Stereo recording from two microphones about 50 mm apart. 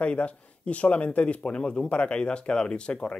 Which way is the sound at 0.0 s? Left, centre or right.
Left.